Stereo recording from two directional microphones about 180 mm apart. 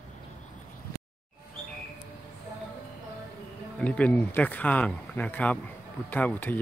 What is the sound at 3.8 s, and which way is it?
Speech, 5° left (ahead or behind).